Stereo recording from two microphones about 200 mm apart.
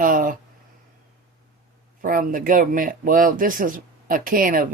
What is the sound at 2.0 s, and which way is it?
Speech, 45° right (ahead or behind).